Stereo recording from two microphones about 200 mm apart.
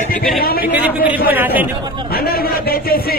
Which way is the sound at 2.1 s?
50° left (ahead or behind).